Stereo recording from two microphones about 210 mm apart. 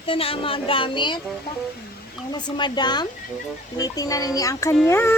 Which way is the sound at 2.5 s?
20° left (ahead or behind).